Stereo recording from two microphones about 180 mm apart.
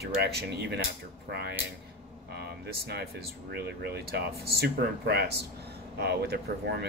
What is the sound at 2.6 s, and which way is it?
Speech, 65° right (ahead or behind).